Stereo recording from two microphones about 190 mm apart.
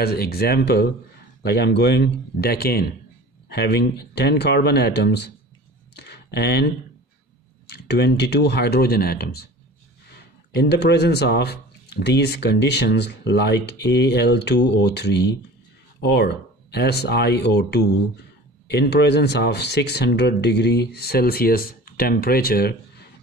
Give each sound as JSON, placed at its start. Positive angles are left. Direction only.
{"t": 0.0, "sound": "speech", "side_deg": 55}
{"t": 5.9, "sound": "a sound", "side_deg": 60}
{"t": 7.6, "sound": "speech", "side_deg": 60}
{"t": 10.5, "sound": "speech", "side_deg": 60}